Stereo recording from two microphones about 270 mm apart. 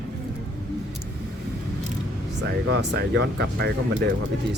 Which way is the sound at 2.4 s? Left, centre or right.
Right.